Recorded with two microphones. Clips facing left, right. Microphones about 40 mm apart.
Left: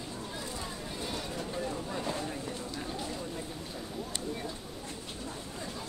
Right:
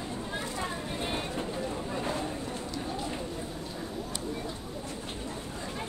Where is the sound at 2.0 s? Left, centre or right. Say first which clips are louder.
Right 3 dB; right.